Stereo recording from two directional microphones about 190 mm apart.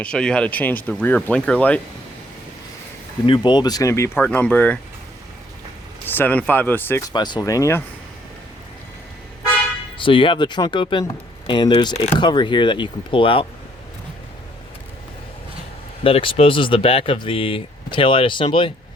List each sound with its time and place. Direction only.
0.0 s speech: 5° left (ahead or behind)
3.2 s speech: 25° left (ahead or behind); by 4.8 s 10° left (ahead or behind)
6.1 s speech: 10° left (ahead or behind)
7.1 s speech: 20° left (ahead or behind)
10.0 s speech: 25° left (ahead or behind)
16.0 s speech: 30° left (ahead or behind)